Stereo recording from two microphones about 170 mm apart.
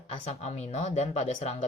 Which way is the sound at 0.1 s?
40° left (ahead or behind).